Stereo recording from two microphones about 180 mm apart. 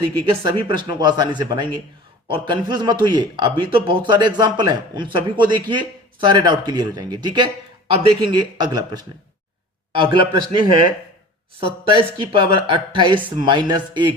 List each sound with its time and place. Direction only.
0.0 s speech: 25° right (ahead or behind)